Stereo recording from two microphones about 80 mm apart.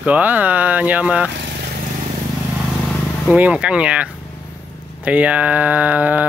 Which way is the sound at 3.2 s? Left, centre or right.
Centre.